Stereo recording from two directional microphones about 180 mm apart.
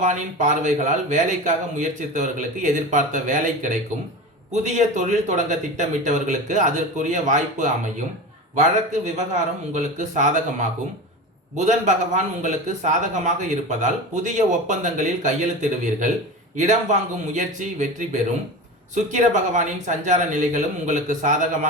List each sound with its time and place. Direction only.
0.0 s a man's voice: 45° right (ahead or behind)